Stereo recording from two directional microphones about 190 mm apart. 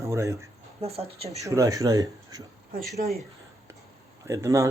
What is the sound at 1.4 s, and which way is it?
Speech, 15° right (ahead or behind).